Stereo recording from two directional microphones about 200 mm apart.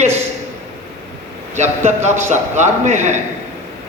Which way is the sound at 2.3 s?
35° right (ahead or behind).